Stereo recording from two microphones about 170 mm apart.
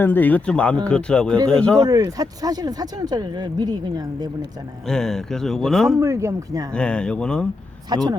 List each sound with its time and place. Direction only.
0.0 s speech: 10° left (ahead or behind)
1.9 s speech: 20° right (ahead or behind)
4.9 s speech: 5° left (ahead or behind)
6.0 s speech: 15° right (ahead or behind)
6.7 s speech: 5° left (ahead or behind)
7.9 s speech: 25° right (ahead or behind)